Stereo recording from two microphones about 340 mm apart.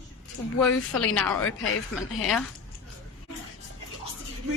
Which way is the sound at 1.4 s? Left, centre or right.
Left.